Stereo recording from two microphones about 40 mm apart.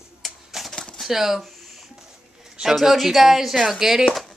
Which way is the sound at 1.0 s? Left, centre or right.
Centre.